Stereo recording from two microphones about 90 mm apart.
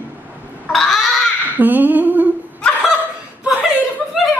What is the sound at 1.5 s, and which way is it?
Speech, 20° right (ahead or behind).